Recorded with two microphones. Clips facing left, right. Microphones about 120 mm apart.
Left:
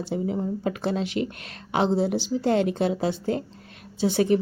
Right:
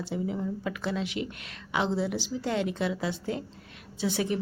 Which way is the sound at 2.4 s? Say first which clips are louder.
Left 7 dB; 40° left (ahead or behind).